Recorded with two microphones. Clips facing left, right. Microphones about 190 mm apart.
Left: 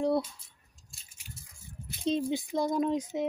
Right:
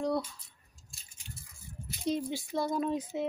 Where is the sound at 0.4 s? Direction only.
Centre (ahead or behind).